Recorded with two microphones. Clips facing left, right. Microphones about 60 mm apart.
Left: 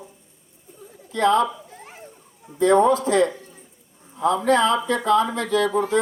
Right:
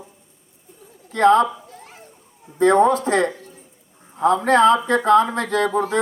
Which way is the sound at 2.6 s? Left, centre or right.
Right.